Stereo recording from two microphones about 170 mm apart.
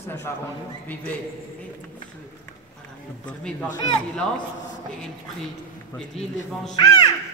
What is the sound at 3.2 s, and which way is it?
Speech, 5° left (ahead or behind).